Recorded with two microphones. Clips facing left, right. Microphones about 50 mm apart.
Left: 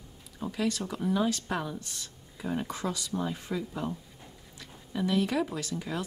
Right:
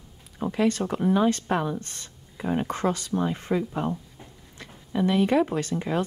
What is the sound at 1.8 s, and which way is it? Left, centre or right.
Speech, right.